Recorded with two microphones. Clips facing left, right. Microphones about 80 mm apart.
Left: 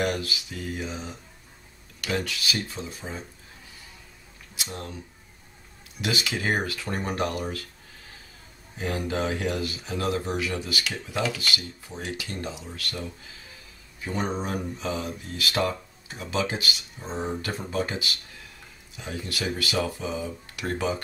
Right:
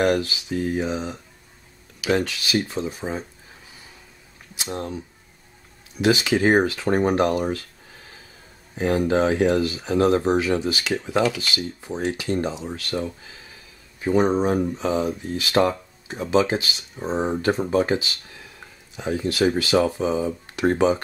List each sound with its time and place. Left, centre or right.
0.2 s speech: right
2.1 s speech: right
4.6 s speech: right
6.0 s speech: right
8.7 s speech: right
14.1 s speech: centre
15.6 s speech: right
16.1 s speech: right